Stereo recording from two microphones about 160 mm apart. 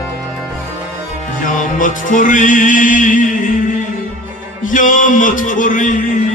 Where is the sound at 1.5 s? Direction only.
55° left (ahead or behind).